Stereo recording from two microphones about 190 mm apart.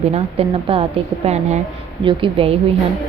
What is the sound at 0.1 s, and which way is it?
A woman's voice, 30° right (ahead or behind).